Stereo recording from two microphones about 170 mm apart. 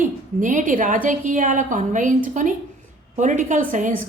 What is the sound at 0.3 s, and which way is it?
A woman's voice, 50° right (ahead or behind).